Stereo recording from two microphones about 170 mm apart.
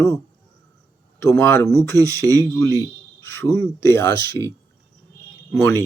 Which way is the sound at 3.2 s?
15° left (ahead or behind).